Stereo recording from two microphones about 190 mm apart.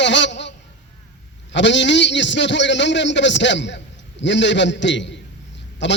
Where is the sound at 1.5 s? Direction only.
70° left (ahead or behind).